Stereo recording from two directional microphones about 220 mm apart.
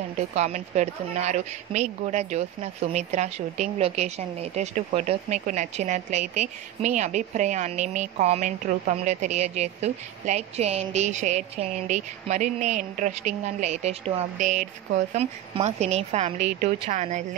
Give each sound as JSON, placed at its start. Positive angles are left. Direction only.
{"t": 0.3, "sound": "a woman's voice", "side_deg": -30}